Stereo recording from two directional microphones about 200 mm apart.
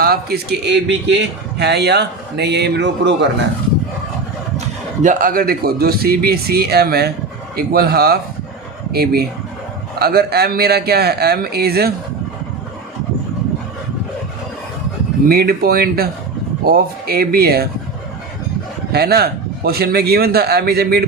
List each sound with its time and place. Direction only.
0.0 s a man's voice: 50° right (ahead or behind)
5.0 s speech: 45° right (ahead or behind)
15.3 s speech: 50° right (ahead or behind)
18.9 s speech: 50° right (ahead or behind)